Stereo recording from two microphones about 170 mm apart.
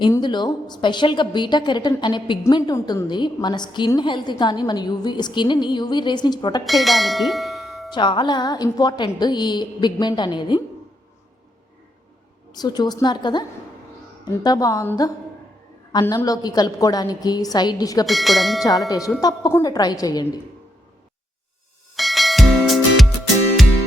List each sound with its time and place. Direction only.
0.1 s a woman's voice: 25° left (ahead or behind)
6.7 s speech: centre (ahead or behind)
7.9 s a woman's voice: 25° left (ahead or behind)
12.5 s a woman's voice: 25° left (ahead or behind)
18.0 s speech: centre (ahead or behind)
18.9 s a woman's voice: 20° left (ahead or behind)
21.9 s music: centre (ahead or behind)